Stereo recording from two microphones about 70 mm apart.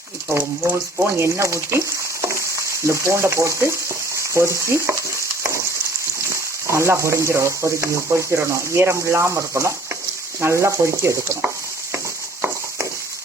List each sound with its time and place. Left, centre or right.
0.3 s speech: right
1.2 s speech: right
2.2 s frying: right
6.7 s speech: right